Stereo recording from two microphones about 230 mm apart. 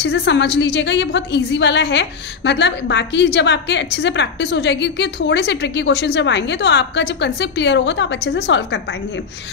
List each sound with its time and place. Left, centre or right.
0.0 s a woman's voice: left